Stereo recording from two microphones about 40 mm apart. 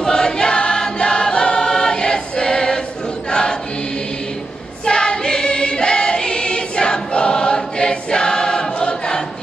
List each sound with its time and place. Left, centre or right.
0.0 s choir: centre
4.8 s choir: left